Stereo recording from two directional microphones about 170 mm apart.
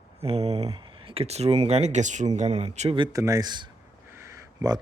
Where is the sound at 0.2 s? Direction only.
35° right (ahead or behind).